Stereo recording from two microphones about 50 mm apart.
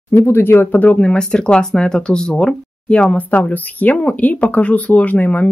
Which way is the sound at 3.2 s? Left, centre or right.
Left.